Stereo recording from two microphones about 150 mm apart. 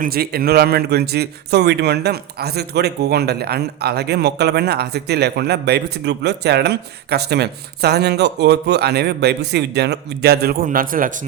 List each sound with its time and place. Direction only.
0.0 s a man's voice: 90° right; by 11.1 s 65° right (ahead or behind)